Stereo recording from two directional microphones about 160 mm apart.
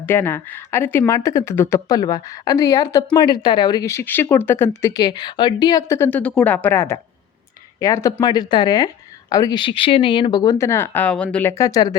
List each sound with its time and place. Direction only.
0.0 s speech: 15° left (ahead or behind)